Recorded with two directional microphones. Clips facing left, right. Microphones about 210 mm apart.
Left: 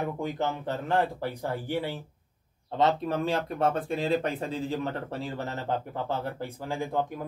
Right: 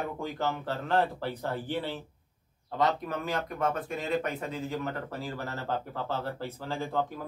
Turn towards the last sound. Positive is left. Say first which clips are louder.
# left 2 dB
turn(degrees=15)  # may be behind; listen again after turning